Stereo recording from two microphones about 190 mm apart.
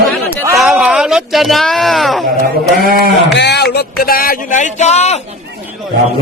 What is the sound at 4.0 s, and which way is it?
A man's voice, 50° left (ahead or behind).